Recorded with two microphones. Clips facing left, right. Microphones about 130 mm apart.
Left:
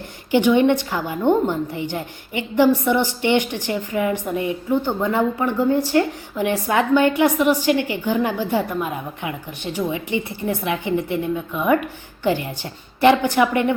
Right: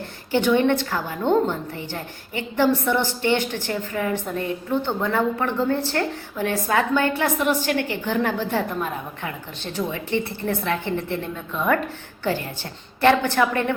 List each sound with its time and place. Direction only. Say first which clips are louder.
0.3 s a woman's voice: left 3 dB; 15° left (ahead or behind)